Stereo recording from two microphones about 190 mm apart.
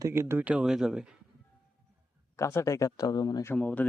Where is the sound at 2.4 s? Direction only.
15° left (ahead or behind).